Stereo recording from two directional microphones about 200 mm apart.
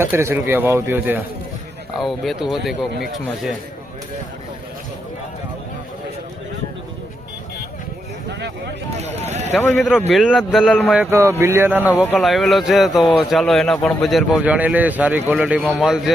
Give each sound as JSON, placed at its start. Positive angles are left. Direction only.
{"t": 0.0, "sound": "a man's voice", "side_deg": -10}
{"t": 8.3, "sound": "a sound", "side_deg": -60}
{"t": 9.6, "sound": "speech", "side_deg": 10}
{"t": 10.1, "sound": "a man's voice", "side_deg": 0}